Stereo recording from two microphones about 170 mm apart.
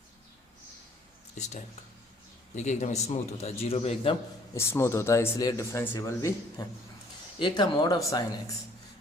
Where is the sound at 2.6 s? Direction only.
45° left (ahead or behind).